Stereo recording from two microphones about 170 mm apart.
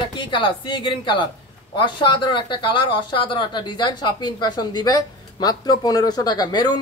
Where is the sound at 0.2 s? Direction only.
25° left (ahead or behind).